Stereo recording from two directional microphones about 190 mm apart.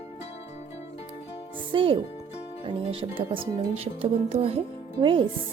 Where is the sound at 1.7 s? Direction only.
30° right (ahead or behind).